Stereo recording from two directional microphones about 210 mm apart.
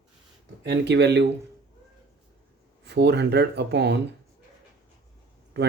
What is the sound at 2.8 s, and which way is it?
Speech, 55° right (ahead or behind).